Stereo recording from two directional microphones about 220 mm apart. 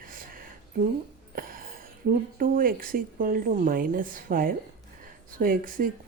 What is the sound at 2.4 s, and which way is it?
A woman's voice, 40° right (ahead or behind).